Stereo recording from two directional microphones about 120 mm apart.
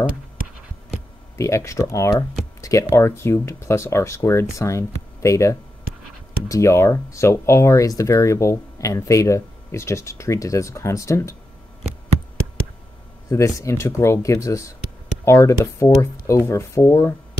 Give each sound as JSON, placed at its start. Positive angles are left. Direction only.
{"t": 1.4, "sound": "speech", "side_deg": 25}
{"t": 13.3, "sound": "speech", "side_deg": 25}